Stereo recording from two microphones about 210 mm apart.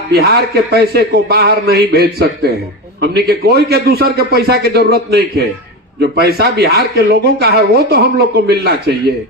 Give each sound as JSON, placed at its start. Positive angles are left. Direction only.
{"t": 0.1, "sound": "speech", "side_deg": -50}